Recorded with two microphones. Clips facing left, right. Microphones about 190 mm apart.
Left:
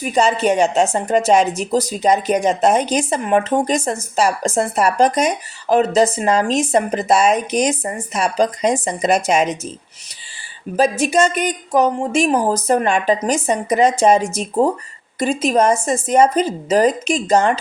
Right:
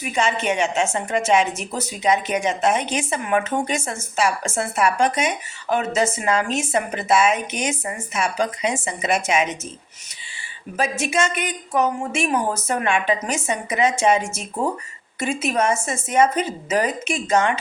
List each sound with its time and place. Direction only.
0.0 s a woman's voice: 35° left (ahead or behind)
10.8 s a woman's voice: 35° left (ahead or behind)